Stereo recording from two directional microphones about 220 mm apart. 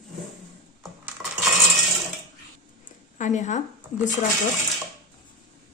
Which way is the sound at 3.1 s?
35° left (ahead or behind).